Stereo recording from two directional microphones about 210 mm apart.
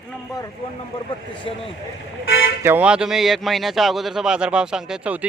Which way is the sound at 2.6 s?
10° right (ahead or behind).